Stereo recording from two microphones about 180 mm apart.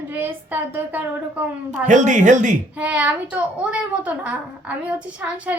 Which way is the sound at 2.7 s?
10° right (ahead or behind).